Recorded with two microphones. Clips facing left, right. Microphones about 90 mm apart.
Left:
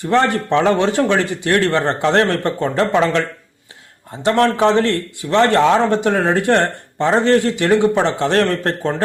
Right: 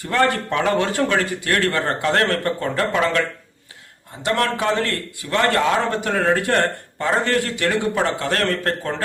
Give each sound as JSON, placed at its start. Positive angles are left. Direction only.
{"t": 0.0, "sound": "speech", "side_deg": 25}